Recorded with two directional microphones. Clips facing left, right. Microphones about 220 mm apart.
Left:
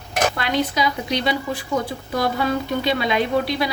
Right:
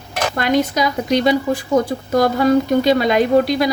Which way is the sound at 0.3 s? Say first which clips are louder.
Right 5 dB; 45° right (ahead or behind).